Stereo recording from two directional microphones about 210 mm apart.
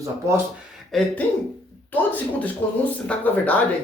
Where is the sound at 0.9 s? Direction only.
Centre (ahead or behind).